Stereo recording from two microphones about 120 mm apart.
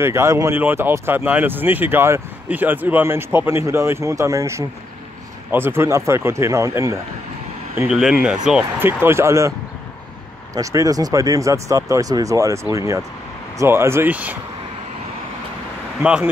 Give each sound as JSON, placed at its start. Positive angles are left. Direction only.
{"t": 0.0, "sound": "speech", "side_deg": -25}
{"t": 7.9, "sound": "speech", "side_deg": -5}
{"t": 8.8, "sound": "speech", "side_deg": -20}
{"t": 10.5, "sound": "speech", "side_deg": -25}
{"t": 16.0, "sound": "speech", "side_deg": -10}